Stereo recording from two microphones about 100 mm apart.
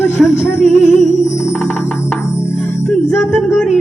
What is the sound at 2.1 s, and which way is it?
Music, 25° left (ahead or behind).